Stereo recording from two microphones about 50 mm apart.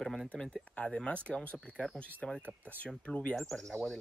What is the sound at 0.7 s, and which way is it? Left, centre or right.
Speech, left.